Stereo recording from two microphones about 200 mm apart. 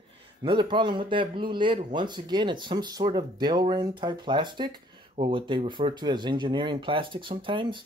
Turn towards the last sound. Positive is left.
turn(degrees=-25)  # may be behind; listen again after turning